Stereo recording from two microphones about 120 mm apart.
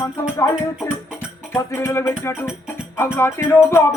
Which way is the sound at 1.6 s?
25° left (ahead or behind).